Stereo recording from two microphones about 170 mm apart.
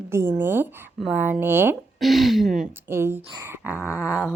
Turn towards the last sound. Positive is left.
turn(degrees=-10)  # may be behind; listen again after turning